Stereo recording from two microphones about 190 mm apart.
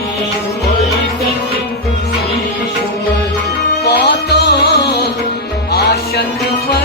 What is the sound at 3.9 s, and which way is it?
Music, 60° left (ahead or behind).